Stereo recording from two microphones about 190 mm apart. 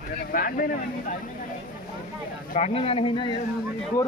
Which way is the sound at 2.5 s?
35° left (ahead or behind).